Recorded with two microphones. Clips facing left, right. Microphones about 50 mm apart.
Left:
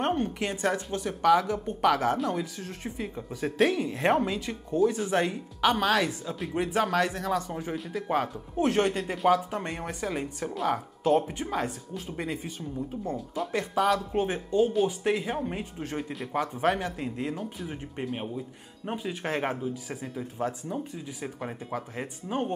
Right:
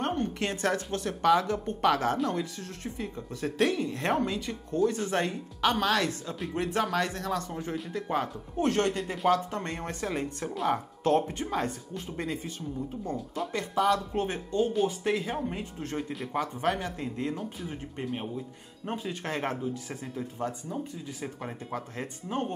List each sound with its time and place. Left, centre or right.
0.1 s a woman's voice: centre
13.6 s speech: centre
16.3 s speech: centre
17.4 s speech: centre